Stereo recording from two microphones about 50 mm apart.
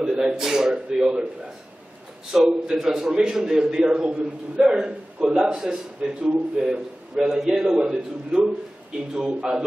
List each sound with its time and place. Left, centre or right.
0.0 s a man's voice: centre
2.3 s a man's voice: centre
7.8 s a man's voice: right